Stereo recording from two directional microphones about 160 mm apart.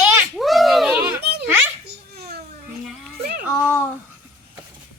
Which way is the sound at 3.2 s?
70° right (ahead or behind).